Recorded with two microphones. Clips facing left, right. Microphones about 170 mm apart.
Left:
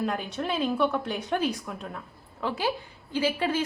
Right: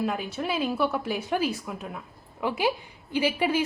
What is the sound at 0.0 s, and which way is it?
A woman's voice, 5° right (ahead or behind).